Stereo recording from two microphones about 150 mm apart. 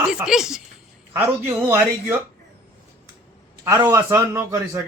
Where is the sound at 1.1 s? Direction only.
15° right (ahead or behind).